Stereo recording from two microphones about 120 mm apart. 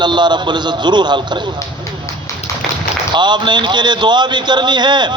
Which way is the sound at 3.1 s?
40° right (ahead or behind).